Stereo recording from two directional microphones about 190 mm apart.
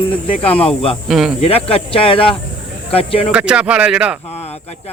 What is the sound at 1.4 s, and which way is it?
Speech, 30° left (ahead or behind).